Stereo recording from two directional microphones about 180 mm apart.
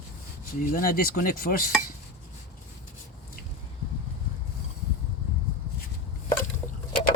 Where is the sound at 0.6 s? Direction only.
55° left (ahead or behind).